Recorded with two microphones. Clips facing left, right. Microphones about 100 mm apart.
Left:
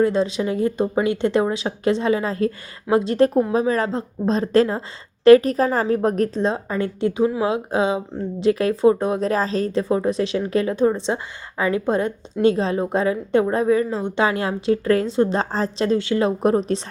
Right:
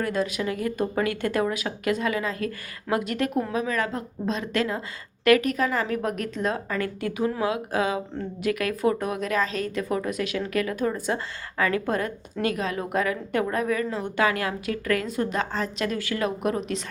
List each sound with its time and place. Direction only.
0.0 s a woman's voice: 25° left (ahead or behind)